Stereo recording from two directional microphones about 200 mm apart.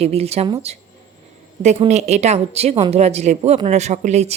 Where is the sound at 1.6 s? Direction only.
35° right (ahead or behind).